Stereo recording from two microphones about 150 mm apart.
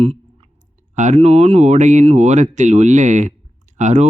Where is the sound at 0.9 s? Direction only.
55° right (ahead or behind).